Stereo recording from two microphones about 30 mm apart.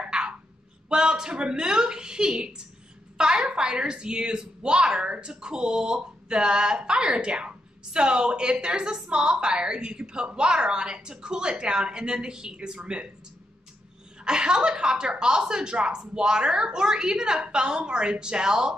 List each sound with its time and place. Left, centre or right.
0.0 s a sound: right
0.8 s speech: right
5.4 s speech: right
14.2 s speech: right